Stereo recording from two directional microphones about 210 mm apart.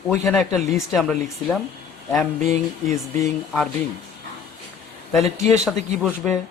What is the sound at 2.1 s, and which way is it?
Speech, 15° left (ahead or behind).